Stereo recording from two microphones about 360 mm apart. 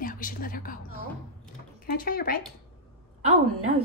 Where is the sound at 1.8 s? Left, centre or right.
Left.